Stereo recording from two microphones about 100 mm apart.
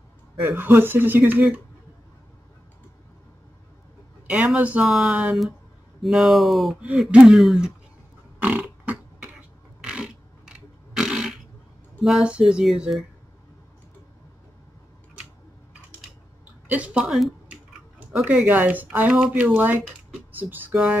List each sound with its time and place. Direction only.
0.4 s speech: 25° right (ahead or behind)
4.6 s speech: 15° right (ahead or behind)
8.4 s a sound: 15° right (ahead or behind)
12.0 s speech: 5° right (ahead or behind)
16.6 s speech: 15° right (ahead or behind)
18.2 s speech: 20° right (ahead or behind)